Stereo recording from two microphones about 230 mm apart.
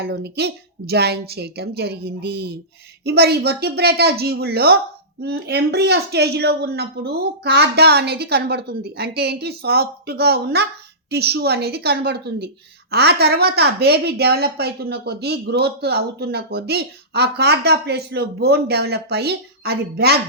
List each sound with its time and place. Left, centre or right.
0.0 s a woman's voice: right